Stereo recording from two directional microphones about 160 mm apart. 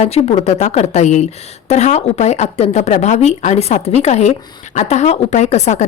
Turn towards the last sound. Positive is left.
turn(degrees=45)  # may be behind; listen again after turning